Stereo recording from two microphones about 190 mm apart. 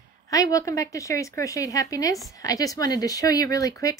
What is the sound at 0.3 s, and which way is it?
Speech, 20° left (ahead or behind).